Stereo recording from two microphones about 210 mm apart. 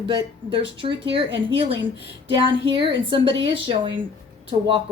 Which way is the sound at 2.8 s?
25° right (ahead or behind).